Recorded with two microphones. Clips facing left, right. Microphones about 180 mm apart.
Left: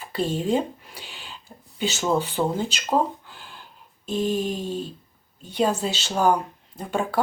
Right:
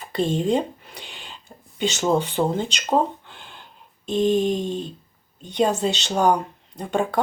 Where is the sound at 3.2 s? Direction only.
5° left (ahead or behind).